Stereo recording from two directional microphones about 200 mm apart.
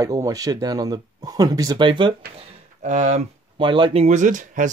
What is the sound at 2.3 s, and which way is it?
Speech, 35° right (ahead or behind).